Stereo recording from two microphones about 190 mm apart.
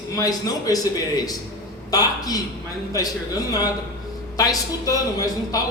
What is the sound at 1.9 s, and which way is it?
A man's voice, 20° left (ahead or behind).